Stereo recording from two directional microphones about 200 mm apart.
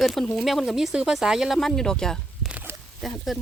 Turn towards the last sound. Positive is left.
turn(degrees=0)  # may be behind; listen again after turning